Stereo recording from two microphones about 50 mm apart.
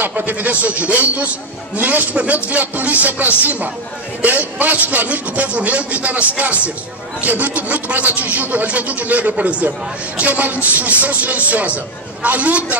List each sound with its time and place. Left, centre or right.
0.0 s a man's voice: right